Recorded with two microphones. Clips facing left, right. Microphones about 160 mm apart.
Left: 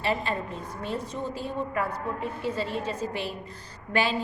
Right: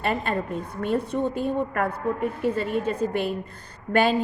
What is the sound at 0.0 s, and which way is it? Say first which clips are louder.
A woman's voice: right 3 dB; 55° right (ahead or behind).